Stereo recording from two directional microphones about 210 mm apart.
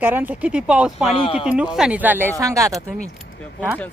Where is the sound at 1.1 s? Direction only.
25° left (ahead or behind).